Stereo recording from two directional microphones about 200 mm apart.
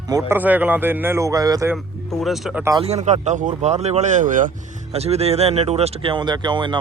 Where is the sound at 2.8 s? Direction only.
35° right (ahead or behind).